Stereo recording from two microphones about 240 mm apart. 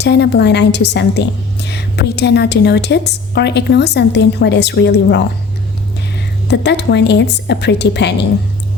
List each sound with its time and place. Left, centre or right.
0.0 s a woman's voice: left
6.5 s a woman's voice: left